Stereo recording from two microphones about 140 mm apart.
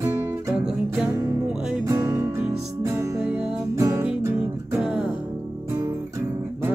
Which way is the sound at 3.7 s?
20° right (ahead or behind).